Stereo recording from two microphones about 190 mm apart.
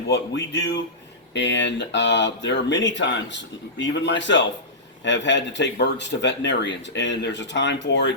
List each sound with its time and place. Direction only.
0.1 s speech: 65° left (ahead or behind)